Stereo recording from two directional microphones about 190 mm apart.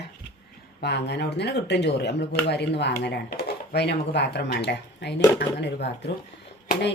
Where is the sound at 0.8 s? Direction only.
60° left (ahead or behind).